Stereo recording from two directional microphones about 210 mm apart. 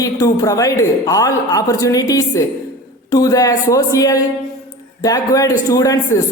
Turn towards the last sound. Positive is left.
turn(degrees=15)  # may be behind; listen again after turning